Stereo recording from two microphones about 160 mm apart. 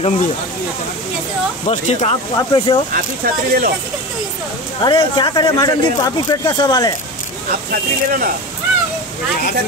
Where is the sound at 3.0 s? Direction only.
70° right (ahead or behind).